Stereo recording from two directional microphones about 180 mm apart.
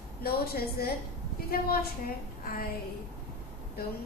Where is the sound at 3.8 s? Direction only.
60° left (ahead or behind).